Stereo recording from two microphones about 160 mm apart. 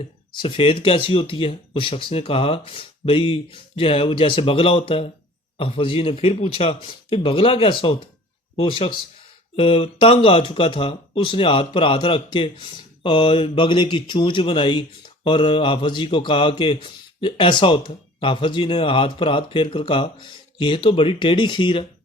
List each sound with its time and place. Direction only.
0.3 s speech: 30° left (ahead or behind)